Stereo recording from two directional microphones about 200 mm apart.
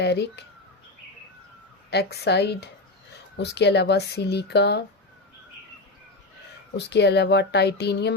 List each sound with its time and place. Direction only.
0.0 s speech: 55° left (ahead or behind)
1.9 s speech: 55° left (ahead or behind)
6.7 s speech: 60° left (ahead or behind)